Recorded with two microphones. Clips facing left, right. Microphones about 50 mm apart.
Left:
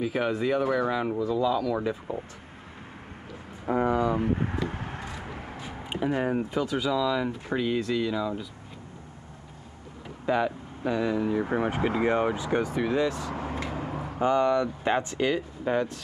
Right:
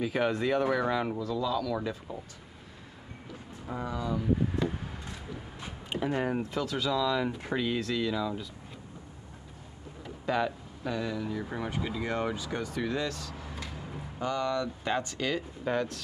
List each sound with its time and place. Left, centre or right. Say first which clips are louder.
0.0 s speech: left 2 dB; centre
1.2 s speech: left 5 dB; centre
3.6 s a sound: left 10 dB; left
5.9 s speech: left 3 dB; centre
10.2 s speech: left 4 dB; centre
13.3 s vehicle: left 9 dB; left
14.2 s speech: left 7 dB; left